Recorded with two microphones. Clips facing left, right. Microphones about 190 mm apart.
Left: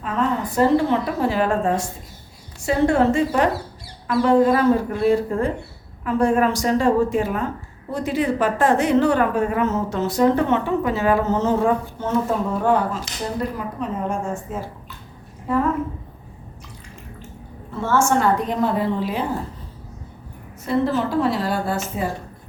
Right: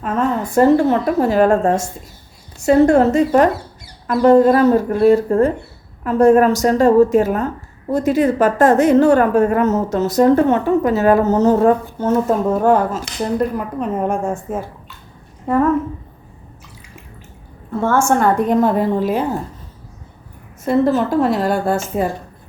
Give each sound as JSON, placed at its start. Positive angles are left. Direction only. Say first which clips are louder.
{"t": 0.0, "sound": "a woman's voice", "louder": "right 4 dB", "side_deg": -45}
{"t": 17.7, "sound": "a woman's voice", "louder": "right 4 dB", "side_deg": -50}
{"t": 20.7, "sound": "a woman's voice", "louder": "right 5 dB", "side_deg": -45}